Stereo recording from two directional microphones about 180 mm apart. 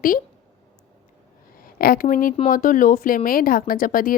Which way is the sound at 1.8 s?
55° left (ahead or behind).